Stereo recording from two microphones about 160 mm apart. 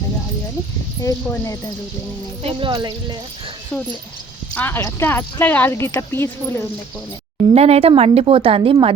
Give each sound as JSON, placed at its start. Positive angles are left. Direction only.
{"t": 1.0, "sound": "speech", "side_deg": 20}
{"t": 2.4, "sound": "a woman's voice", "side_deg": -35}
{"t": 4.5, "sound": "speech", "side_deg": 15}
{"t": 7.5, "sound": "a woman's voice", "side_deg": -40}